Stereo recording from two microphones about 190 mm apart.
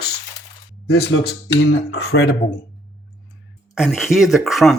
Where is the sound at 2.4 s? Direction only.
45° left (ahead or behind).